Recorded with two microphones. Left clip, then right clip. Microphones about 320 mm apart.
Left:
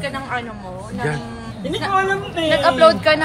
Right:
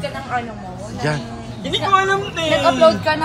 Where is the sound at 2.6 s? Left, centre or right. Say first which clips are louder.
Left 1 dB; centre.